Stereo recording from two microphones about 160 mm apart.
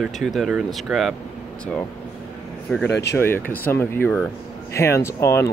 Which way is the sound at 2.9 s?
90° left.